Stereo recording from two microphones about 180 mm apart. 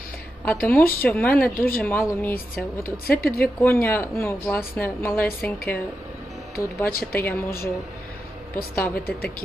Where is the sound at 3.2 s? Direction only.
55° left (ahead or behind).